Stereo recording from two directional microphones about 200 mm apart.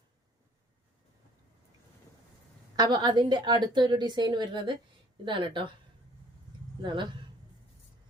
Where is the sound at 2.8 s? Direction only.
20° right (ahead or behind).